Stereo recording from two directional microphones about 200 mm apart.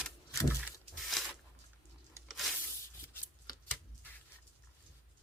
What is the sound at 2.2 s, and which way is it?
Tearing, centre (ahead or behind).